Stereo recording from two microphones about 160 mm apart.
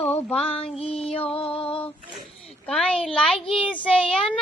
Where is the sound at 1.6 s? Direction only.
35° left (ahead or behind).